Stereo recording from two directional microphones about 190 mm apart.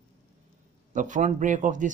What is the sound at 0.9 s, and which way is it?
Speech, 40° right (ahead or behind).